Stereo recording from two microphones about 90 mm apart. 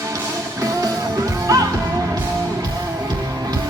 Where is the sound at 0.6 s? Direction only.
40° right (ahead or behind).